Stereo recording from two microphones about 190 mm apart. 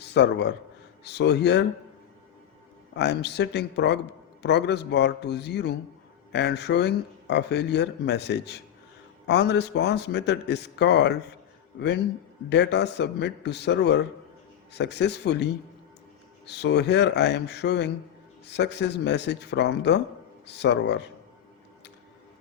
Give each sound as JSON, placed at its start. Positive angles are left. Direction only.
{"t": 0.0, "sound": "speech", "side_deg": 65}
{"t": 2.9, "sound": "speech", "side_deg": 65}
{"t": 12.5, "sound": "speech", "side_deg": 65}
{"t": 16.5, "sound": "speech", "side_deg": 60}